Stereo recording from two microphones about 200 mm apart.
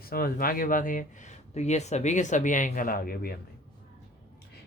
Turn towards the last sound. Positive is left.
turn(degrees=50)  # may be behind; listen again after turning